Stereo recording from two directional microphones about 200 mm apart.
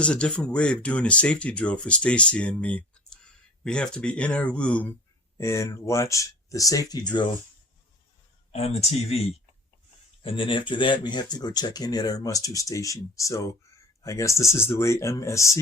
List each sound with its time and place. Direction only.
0.0 s speech: 5° left (ahead or behind); by 7.3 s 20° left (ahead or behind)
8.5 s speech: 30° left (ahead or behind)
10.2 s speech: 25° left (ahead or behind)